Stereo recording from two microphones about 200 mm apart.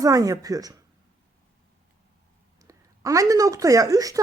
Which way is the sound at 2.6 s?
15° right (ahead or behind).